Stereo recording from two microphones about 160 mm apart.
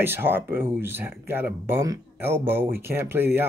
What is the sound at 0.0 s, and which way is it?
A man's voice, 15° right (ahead or behind).